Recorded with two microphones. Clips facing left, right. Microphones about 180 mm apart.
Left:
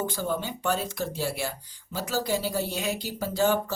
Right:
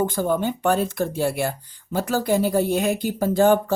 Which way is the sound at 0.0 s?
55° right (ahead or behind).